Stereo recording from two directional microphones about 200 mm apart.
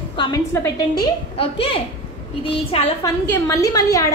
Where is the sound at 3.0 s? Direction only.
15° left (ahead or behind).